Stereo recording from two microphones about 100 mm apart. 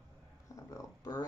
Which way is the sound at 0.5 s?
35° left (ahead or behind).